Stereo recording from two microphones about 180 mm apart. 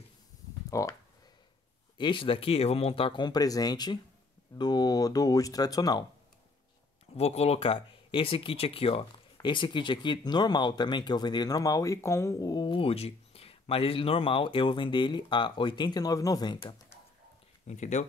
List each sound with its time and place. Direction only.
0.7 s speech: 20° left (ahead or behind)
2.0 s speech: 30° left (ahead or behind)
7.2 s speech: 35° left (ahead or behind); by 17.0 s 20° left (ahead or behind)
17.6 s speech: 40° left (ahead or behind)